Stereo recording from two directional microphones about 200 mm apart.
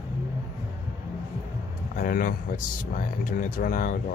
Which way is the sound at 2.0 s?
45° left (ahead or behind).